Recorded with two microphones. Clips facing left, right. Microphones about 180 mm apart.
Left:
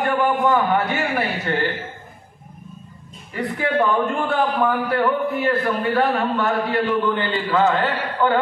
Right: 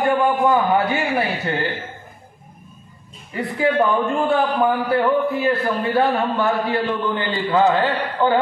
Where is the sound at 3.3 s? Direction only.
25° right (ahead or behind).